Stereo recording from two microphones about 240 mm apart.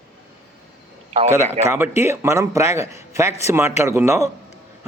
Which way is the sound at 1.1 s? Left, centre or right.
Right.